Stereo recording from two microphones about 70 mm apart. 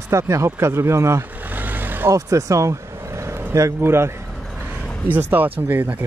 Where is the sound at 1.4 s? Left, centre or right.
Right.